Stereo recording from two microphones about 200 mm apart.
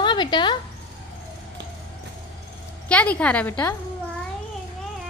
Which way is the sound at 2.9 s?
5° left (ahead or behind).